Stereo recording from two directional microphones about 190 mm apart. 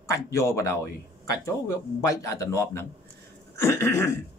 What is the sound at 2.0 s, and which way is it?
Speech, 15° left (ahead or behind).